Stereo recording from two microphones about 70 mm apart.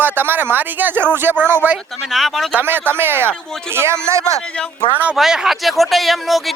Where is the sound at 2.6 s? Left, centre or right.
Right.